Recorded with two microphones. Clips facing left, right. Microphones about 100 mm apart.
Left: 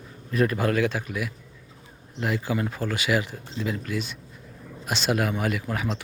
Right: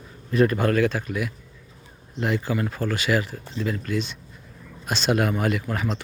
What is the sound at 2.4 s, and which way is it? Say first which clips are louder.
Speech: right 2 dB; 15° left (ahead or behind).